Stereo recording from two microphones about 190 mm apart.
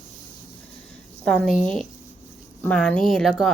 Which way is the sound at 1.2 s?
Centre (ahead or behind).